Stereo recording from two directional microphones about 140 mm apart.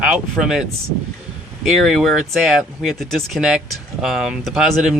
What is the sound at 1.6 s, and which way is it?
Speech, centre (ahead or behind).